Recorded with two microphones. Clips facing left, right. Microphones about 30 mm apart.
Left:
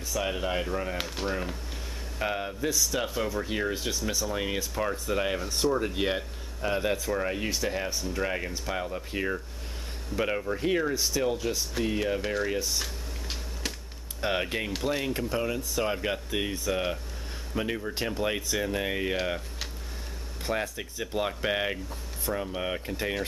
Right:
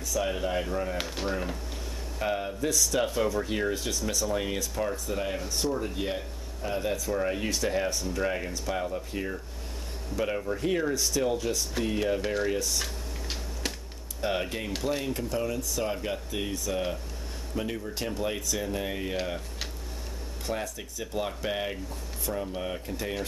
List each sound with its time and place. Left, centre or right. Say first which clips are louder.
0.1 s speech: right 1 dB; centre
1.0 s speech: even; centre
2.1 s speech: right 1 dB; centre
14.2 s speech: left 1 dB; centre
15.1 s speech: left 1 dB; left
20.4 s speech: left 3 dB; left